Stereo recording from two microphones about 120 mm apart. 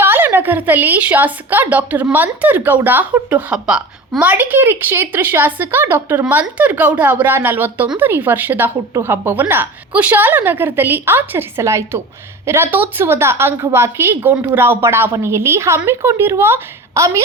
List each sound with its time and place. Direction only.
0.0 s a woman's voice: 20° right (ahead or behind)